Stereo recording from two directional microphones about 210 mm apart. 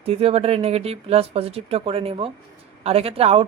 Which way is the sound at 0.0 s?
25° right (ahead or behind).